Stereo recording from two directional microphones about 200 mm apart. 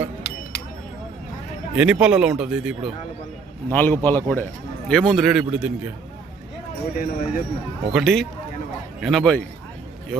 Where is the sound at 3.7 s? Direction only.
10° left (ahead or behind).